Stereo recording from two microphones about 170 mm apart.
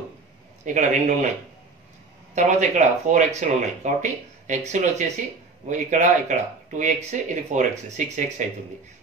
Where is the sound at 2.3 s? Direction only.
40° right (ahead or behind).